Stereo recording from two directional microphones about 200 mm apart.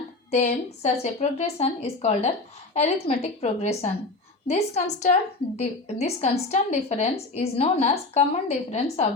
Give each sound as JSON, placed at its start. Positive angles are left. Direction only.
{"t": 0.3, "sound": "speech", "side_deg": 35}